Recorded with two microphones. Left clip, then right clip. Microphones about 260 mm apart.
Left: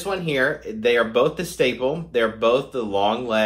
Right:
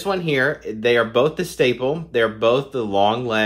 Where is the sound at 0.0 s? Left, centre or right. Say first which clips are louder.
Right 2 dB; right.